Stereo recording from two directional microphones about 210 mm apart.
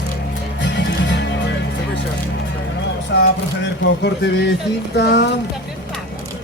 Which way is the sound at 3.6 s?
55° left (ahead or behind).